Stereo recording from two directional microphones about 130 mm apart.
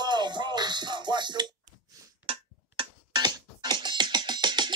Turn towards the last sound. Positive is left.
turn(degrees=-35)  # may be behind; listen again after turning